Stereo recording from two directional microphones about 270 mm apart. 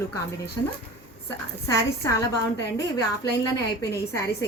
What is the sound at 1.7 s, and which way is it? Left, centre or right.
A woman's voice, centre.